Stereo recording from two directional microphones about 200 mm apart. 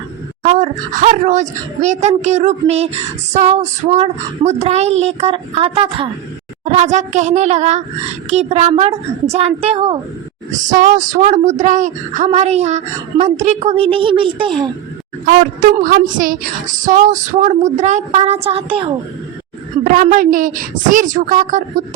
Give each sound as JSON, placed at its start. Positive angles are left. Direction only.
{"t": 0.4, "sound": "a woman's voice", "side_deg": -35}
{"t": 10.5, "sound": "speech", "side_deg": -40}
{"t": 15.3, "sound": "speech", "side_deg": -45}
{"t": 19.8, "sound": "speech", "side_deg": -40}